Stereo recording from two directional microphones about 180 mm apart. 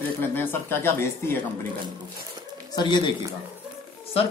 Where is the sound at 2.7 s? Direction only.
25° left (ahead or behind).